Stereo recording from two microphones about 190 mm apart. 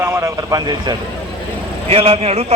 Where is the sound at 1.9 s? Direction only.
30° right (ahead or behind).